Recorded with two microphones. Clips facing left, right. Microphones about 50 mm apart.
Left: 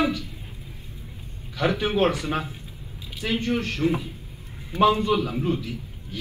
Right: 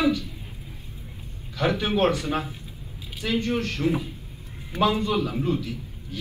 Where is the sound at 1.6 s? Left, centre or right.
Left.